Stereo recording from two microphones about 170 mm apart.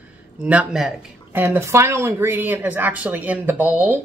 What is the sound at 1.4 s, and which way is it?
Speech, 15° right (ahead or behind).